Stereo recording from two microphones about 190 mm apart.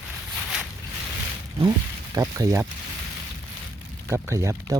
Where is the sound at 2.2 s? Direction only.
20° right (ahead or behind).